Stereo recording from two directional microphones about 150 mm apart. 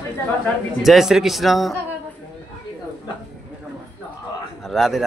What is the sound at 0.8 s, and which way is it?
Speech, centre (ahead or behind).